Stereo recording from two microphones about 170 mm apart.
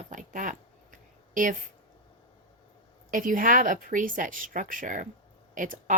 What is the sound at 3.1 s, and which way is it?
Speech, 55° right (ahead or behind).